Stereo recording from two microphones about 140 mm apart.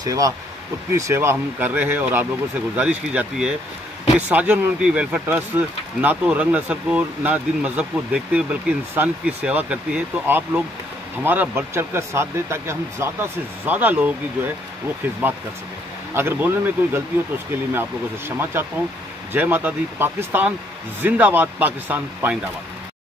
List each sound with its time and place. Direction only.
0.0 s speech: 25° right (ahead or behind)
16.2 s speech: 15° right (ahead or behind)
18.4 s speech: 15° right (ahead or behind)